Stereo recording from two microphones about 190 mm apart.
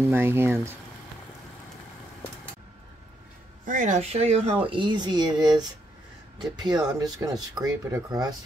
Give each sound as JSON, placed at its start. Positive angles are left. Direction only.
{"t": 0.0, "sound": "speech", "side_deg": -10}
{"t": 3.6, "sound": "speech", "side_deg": -45}